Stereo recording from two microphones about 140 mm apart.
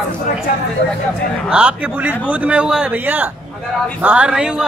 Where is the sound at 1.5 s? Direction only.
10° right (ahead or behind).